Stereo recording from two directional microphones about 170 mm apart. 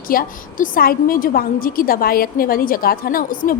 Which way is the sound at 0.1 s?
55° left (ahead or behind).